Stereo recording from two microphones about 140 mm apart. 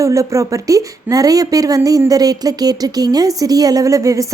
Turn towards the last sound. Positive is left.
turn(degrees=-25)  # may be behind; listen again after turning